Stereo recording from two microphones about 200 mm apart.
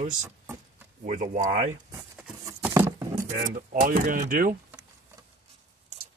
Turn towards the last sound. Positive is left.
turn(degrees=-45)  # may be behind; listen again after turning